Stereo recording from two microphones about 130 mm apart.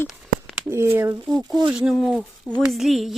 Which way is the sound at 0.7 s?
20° right (ahead or behind).